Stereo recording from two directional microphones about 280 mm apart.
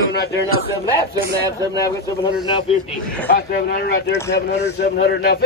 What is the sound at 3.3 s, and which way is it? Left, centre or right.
A man's voice, left.